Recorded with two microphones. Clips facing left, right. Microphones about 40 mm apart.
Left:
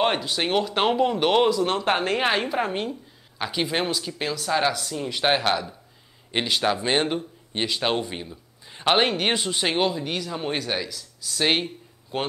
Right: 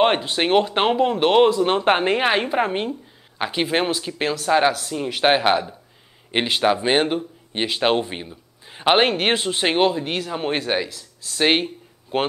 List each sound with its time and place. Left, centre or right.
0.0 s a man's voice: right
1.5 s speech: right
11.6 s a sound: right